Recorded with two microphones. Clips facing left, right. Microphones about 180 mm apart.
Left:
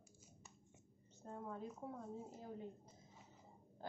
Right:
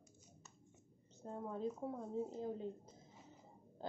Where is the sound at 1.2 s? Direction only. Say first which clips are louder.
Right 6 dB; 25° right (ahead or behind).